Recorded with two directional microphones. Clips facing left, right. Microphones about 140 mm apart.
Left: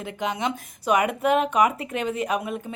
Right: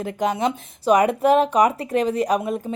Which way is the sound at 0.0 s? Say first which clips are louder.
Right 5 dB; 40° right (ahead or behind).